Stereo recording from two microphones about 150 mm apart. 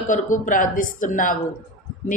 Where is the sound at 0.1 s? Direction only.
60° left (ahead or behind).